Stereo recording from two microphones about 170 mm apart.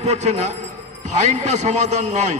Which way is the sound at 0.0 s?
40° right (ahead or behind).